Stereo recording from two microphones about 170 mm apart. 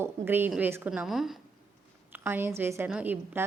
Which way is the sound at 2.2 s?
15° right (ahead or behind).